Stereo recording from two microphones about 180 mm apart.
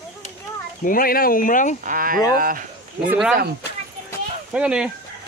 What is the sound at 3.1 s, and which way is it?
Speech, centre (ahead or behind).